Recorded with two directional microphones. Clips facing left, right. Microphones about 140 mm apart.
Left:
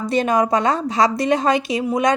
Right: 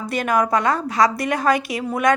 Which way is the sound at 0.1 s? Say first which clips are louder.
Left 2 dB; 25° left (ahead or behind).